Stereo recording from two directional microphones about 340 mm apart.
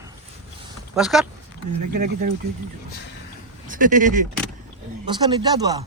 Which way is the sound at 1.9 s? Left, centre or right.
Right.